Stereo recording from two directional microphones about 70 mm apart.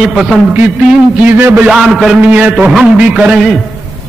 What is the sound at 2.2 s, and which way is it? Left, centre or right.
Speech, centre.